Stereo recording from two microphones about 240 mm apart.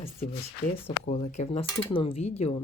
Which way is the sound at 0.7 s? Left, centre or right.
Left.